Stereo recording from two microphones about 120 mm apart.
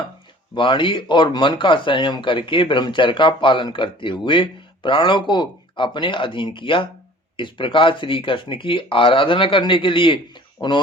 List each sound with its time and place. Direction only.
0.5 s speech: 45° left (ahead or behind)